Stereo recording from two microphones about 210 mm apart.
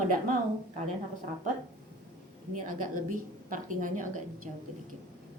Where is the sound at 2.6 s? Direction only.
40° right (ahead or behind).